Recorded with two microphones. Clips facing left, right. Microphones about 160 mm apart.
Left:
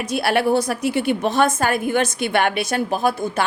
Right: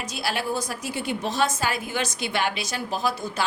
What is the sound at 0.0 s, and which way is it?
A woman's voice, 60° left (ahead or behind).